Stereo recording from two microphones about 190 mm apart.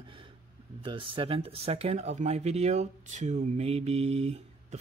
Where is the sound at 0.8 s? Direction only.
25° right (ahead or behind).